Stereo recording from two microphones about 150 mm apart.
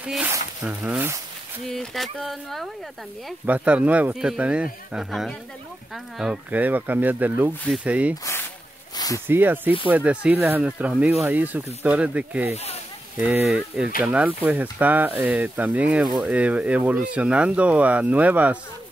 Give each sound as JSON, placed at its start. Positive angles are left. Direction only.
{"t": 0.0, "sound": "speech", "side_deg": -10}
{"t": 1.7, "sound": "speech", "side_deg": 0}
{"t": 3.4, "sound": "speech", "side_deg": -10}
{"t": 8.9, "sound": "snake", "side_deg": 25}
{"t": 9.3, "sound": "speech", "side_deg": -15}
{"t": 14.0, "sound": "speech", "side_deg": -10}